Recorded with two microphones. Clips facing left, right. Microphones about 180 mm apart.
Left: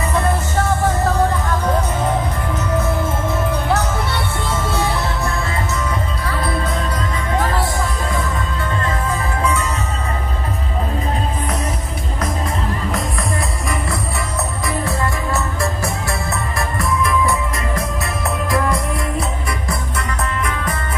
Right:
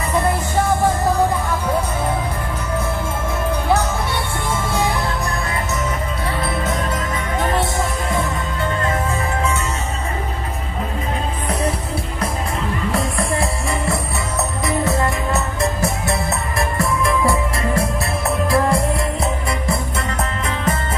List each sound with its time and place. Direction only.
0.1 s music: 10° right (ahead or behind)
9.4 s music: 25° right (ahead or behind)
14.7 s music: 20° right (ahead or behind)